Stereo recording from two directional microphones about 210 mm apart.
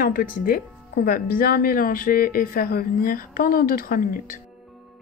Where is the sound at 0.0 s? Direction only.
45° left (ahead or behind).